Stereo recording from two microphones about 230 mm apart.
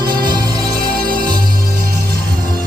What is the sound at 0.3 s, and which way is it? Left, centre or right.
Music, centre.